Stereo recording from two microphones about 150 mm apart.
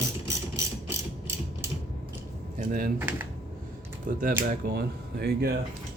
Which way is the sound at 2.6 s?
65° right (ahead or behind).